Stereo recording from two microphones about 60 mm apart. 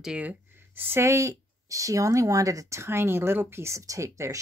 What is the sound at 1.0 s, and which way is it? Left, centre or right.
Speech, right.